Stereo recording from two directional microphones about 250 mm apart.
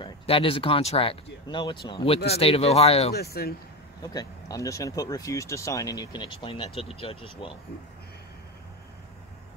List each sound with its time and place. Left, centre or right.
0.0 s speech: left
3.4 s speech: left
4.0 s speech: centre